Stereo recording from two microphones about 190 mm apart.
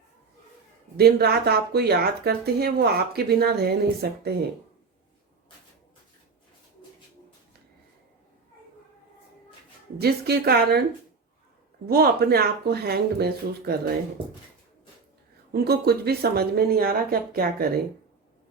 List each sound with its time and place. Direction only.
0.9 s speech: 55° right (ahead or behind)
10.0 s speech: 55° right (ahead or behind)
11.9 s speech: 55° right (ahead or behind)
15.5 s speech: 55° right (ahead or behind)